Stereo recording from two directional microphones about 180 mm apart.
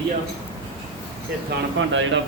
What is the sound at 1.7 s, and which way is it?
Speech, 90° right.